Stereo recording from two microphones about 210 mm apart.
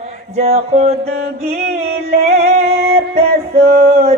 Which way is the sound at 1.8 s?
30° right (ahead or behind).